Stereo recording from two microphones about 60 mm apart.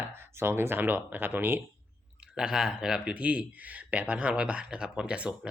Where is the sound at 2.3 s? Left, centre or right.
Centre.